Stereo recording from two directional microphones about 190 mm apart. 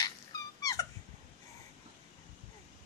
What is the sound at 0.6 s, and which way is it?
Dog, 15° left (ahead or behind).